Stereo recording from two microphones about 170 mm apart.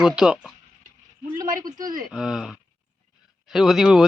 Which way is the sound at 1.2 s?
25° right (ahead or behind).